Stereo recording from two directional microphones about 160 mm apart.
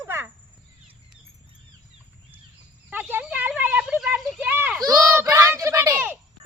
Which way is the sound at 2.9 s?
10° right (ahead or behind).